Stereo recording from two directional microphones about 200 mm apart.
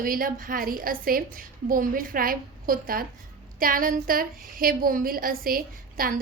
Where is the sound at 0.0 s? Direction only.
45° right (ahead or behind).